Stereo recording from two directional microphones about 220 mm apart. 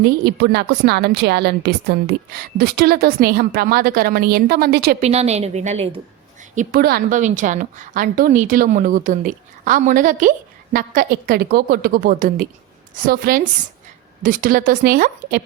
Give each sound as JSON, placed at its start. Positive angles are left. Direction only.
{"t": 0.0, "sound": "a woman's voice", "side_deg": -50}
{"t": 5.0, "sound": "a woman's voice", "side_deg": -30}
{"t": 6.6, "sound": "a woman's voice", "side_deg": -45}